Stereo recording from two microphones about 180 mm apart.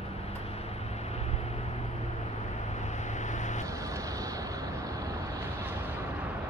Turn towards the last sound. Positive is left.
turn(degrees=-20)  # may be behind; listen again after turning